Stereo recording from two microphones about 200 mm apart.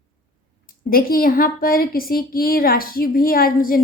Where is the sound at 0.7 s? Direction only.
45° left (ahead or behind).